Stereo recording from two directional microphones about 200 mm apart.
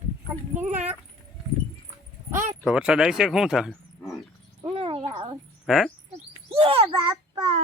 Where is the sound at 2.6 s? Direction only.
5° right (ahead or behind).